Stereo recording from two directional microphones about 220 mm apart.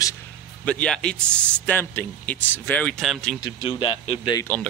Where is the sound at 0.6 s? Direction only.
5° left (ahead or behind).